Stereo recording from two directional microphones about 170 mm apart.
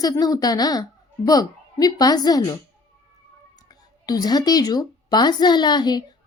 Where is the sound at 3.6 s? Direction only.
20° left (ahead or behind).